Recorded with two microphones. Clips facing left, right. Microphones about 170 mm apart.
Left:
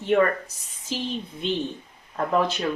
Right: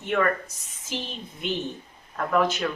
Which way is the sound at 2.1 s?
30° left (ahead or behind).